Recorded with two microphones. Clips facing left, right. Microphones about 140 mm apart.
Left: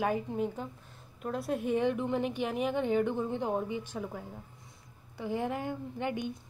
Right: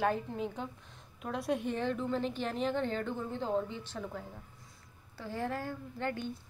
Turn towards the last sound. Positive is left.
turn(degrees=15)  # may be behind; listen again after turning